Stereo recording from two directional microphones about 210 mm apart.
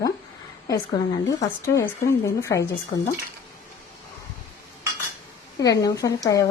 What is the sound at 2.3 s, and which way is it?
Speech, 15° left (ahead or behind).